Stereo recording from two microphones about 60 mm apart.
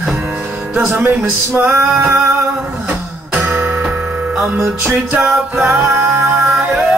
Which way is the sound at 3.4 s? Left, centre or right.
Right.